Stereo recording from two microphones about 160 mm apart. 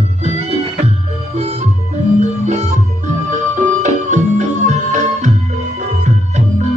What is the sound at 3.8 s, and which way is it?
Music, 50° right (ahead or behind).